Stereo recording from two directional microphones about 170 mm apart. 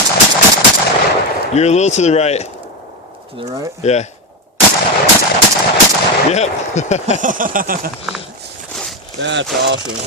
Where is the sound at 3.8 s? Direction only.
40° left (ahead or behind).